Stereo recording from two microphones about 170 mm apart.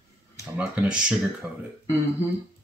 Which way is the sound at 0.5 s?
5° right (ahead or behind).